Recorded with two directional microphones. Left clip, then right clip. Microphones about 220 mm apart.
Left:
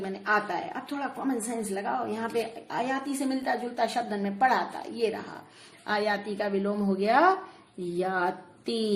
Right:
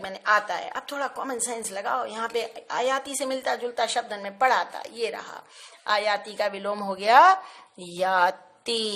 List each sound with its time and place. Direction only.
0.0 s a woman's voice: 40° right (ahead or behind)